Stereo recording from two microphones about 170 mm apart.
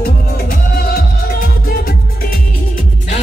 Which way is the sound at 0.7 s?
65° left (ahead or behind).